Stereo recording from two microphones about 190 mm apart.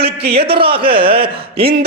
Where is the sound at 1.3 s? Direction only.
30° right (ahead or behind).